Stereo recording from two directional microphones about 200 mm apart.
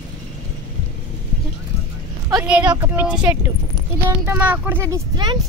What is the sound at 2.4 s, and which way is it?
Speech, 5° right (ahead or behind).